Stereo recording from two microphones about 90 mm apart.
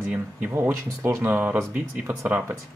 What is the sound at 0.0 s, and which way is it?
Speech, 25° right (ahead or behind).